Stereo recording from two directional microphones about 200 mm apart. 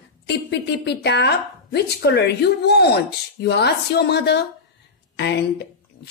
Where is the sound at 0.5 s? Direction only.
55° left (ahead or behind).